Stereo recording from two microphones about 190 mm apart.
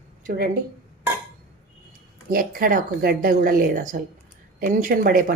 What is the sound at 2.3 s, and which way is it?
A woman's voice, 50° right (ahead or behind).